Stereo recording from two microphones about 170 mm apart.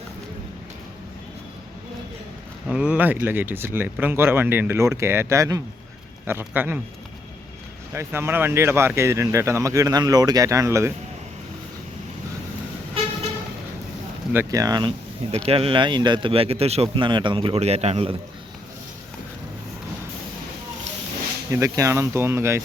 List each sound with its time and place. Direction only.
2.6 s speech: 5° right (ahead or behind)
7.9 s speech: 15° right (ahead or behind)
14.3 s speech: 20° right (ahead or behind)
21.5 s speech: 20° right (ahead or behind)